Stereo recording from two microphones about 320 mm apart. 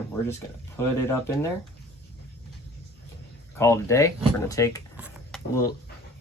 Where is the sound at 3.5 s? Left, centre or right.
Centre.